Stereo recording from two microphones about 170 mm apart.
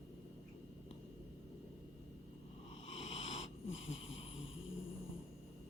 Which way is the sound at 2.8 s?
40° left (ahead or behind).